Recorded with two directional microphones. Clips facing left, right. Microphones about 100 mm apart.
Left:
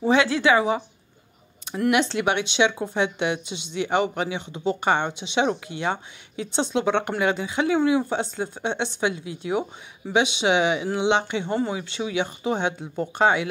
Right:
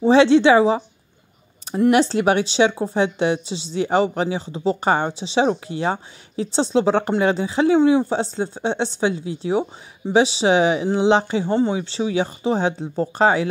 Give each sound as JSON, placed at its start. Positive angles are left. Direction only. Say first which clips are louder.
{"t": 0.0, "sound": "a woman's voice", "louder": "right 7 dB", "side_deg": -30}
{"t": 1.9, "sound": "a woman's voice", "louder": "right 5 dB", "side_deg": -35}